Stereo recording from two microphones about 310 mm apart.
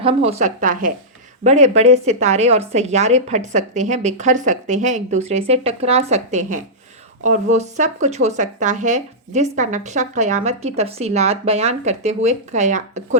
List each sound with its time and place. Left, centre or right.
0.0 s speech: centre